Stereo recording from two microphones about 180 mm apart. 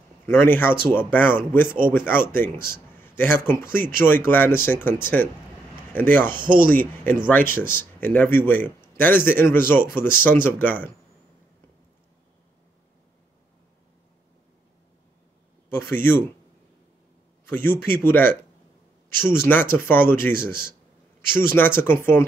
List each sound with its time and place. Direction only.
0.3 s a man's voice: 10° left (ahead or behind)
6.3 s speech: 25° right (ahead or behind)
6.8 s a man's voice: 10° left (ahead or behind)
15.7 s a man's voice: 10° left (ahead or behind)
17.5 s a man's voice: 10° left (ahead or behind)